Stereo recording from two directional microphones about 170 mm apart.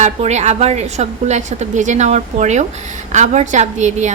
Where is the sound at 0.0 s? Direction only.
40° right (ahead or behind).